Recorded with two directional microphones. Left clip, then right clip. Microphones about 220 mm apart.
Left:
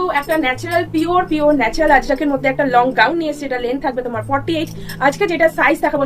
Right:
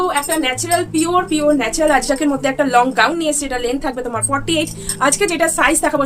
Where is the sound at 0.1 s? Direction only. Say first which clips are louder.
Left 1 dB; 15° right (ahead or behind).